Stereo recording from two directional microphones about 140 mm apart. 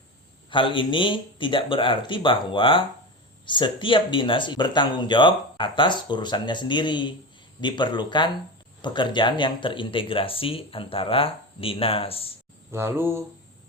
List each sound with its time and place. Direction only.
0.5 s speech: 35° left (ahead or behind)
12.7 s mantra: 15° right (ahead or behind)